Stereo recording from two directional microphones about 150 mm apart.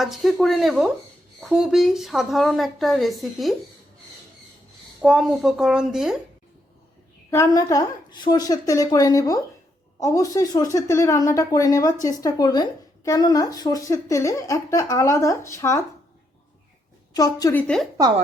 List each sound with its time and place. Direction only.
0.0 s speech: centre (ahead or behind)
5.0 s speech: centre (ahead or behind)
7.3 s speech: 20° left (ahead or behind)
17.2 s speech: 25° left (ahead or behind)
17.5 s speech: 10° left (ahead or behind)